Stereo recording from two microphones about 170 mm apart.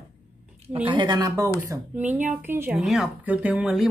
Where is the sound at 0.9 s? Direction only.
25° right (ahead or behind).